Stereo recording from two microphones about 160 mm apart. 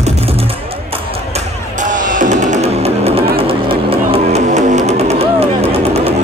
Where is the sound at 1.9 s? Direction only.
55° right (ahead or behind).